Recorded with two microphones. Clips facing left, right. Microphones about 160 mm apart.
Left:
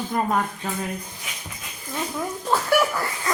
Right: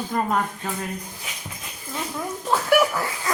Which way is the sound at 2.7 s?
5° right (ahead or behind).